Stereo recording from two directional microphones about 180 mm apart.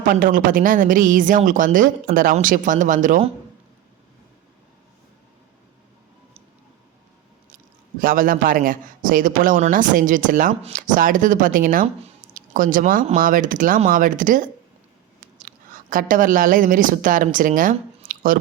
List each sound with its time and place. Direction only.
0.1 s a man's voice: 50° right (ahead or behind)
8.0 s a man's voice: 50° right (ahead or behind)
18.1 s a sound: 50° right (ahead or behind)